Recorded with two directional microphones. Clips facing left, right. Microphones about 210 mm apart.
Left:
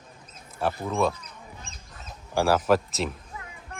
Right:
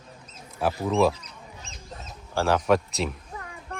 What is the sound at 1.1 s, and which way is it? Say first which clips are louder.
Duck: even; 55° left (ahead or behind).